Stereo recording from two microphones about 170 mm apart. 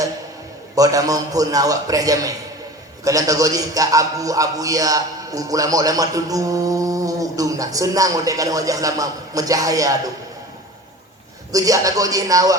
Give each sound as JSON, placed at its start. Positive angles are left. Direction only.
{"t": 0.8, "sound": "speech", "side_deg": -20}
{"t": 11.5, "sound": "speech", "side_deg": -20}